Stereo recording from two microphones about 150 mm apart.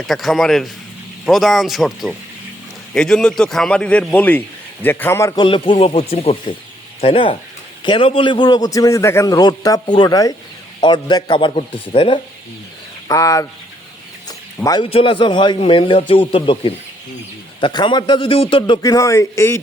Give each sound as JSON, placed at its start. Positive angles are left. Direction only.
{"t": 0.1, "sound": "a man's voice", "side_deg": 0}
{"t": 5.3, "sound": "a man's voice", "side_deg": 35}
{"t": 13.1, "sound": "a man's voice", "side_deg": 20}
{"t": 14.3, "sound": "a sound", "side_deg": 25}
{"t": 14.8, "sound": "a man's voice", "side_deg": 35}
{"t": 18.8, "sound": "a man's voice", "side_deg": 25}